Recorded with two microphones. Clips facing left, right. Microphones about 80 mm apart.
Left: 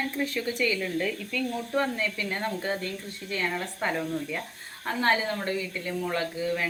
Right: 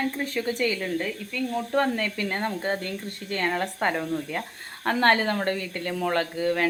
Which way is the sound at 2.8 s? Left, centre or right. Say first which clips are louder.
Right 2 dB; right.